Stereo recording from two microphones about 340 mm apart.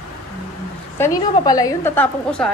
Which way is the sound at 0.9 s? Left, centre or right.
Centre.